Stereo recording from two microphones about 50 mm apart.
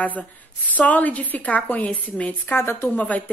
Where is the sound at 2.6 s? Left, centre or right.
Left.